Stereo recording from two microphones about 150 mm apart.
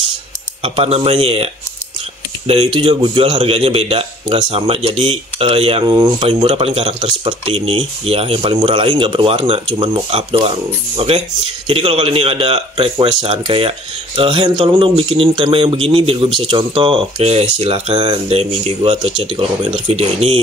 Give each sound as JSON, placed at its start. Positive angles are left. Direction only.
{"t": 0.6, "sound": "a man's voice", "side_deg": -40}